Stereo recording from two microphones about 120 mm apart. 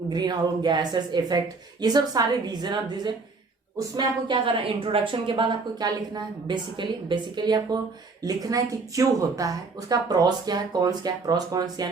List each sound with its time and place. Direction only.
0.1 s a woman's voice: 35° right (ahead or behind)